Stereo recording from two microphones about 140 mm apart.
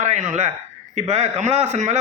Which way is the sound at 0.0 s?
55° right (ahead or behind).